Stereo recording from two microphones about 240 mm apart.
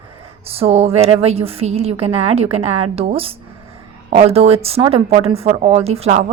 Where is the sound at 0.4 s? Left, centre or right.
Right.